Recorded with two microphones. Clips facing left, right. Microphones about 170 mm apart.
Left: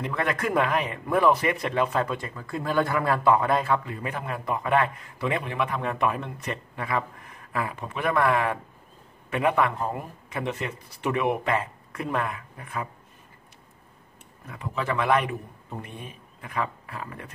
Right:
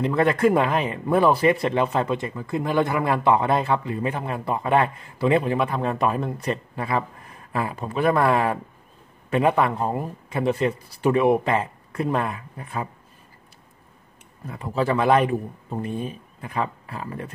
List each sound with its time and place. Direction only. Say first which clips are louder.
0.0 s a man's voice: right 8 dB; 30° right (ahead or behind)
14.5 s a man's voice: right 6 dB; 35° right (ahead or behind)